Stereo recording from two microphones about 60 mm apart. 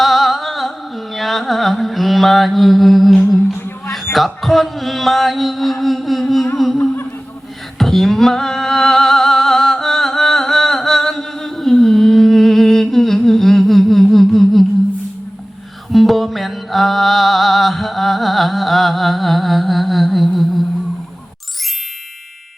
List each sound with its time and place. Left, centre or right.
0.0 s carnatic music: centre
4.1 s music: centre
7.8 s music: centre
15.9 s music: centre